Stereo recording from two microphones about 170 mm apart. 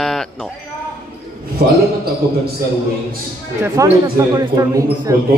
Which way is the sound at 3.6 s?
15° right (ahead or behind).